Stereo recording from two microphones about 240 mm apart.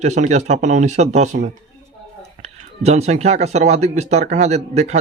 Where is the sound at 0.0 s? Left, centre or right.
Right.